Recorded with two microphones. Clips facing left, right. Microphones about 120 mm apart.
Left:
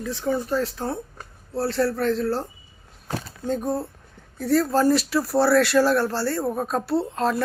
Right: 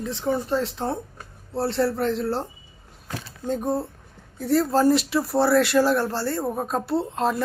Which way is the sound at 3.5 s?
20° right (ahead or behind).